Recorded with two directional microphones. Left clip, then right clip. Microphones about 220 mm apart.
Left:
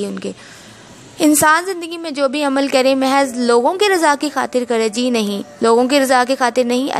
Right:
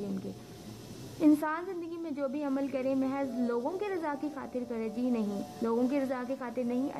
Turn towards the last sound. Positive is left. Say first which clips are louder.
# left 18 dB
turn(degrees=35)  # may be behind; listen again after turning